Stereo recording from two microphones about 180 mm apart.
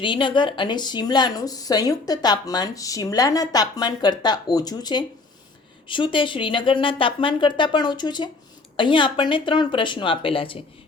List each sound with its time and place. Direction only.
0.0 s speech: 25° left (ahead or behind)